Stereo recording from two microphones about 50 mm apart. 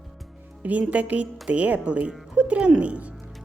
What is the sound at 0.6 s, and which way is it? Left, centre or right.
A woman's voice, right.